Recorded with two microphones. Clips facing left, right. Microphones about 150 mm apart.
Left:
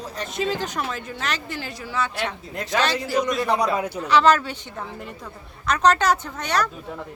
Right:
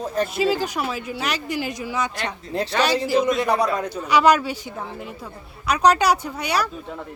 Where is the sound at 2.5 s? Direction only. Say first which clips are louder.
Right 11 dB; 30° right (ahead or behind).